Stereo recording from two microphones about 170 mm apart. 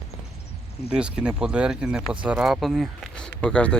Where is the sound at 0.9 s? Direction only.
5° right (ahead or behind).